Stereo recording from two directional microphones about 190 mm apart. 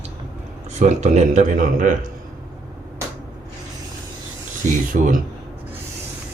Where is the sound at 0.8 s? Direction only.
40° right (ahead or behind).